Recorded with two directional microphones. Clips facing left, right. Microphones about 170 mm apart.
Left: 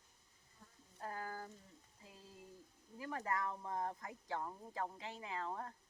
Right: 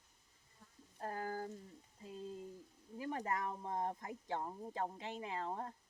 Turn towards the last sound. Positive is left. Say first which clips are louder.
# right 2 dB
turn(degrees=-25)  # may be behind; listen again after turning